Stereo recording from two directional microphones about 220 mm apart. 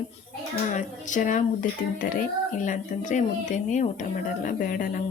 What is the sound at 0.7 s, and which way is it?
Speech, 35° left (ahead or behind).